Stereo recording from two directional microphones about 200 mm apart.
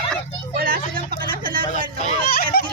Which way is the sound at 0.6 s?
45° right (ahead or behind).